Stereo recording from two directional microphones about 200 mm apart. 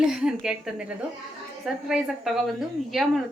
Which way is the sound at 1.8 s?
Centre (ahead or behind).